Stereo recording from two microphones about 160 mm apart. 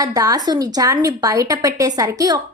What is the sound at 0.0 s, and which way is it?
A woman's voice, 20° right (ahead or behind).